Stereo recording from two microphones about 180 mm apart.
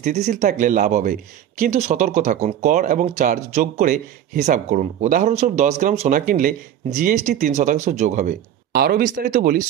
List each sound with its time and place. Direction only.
0.0 s speech: 40° right (ahead or behind)
3.9 s speech: 60° right (ahead or behind); by 8.4 s 40° right (ahead or behind)
8.7 s speech: 55° right (ahead or behind)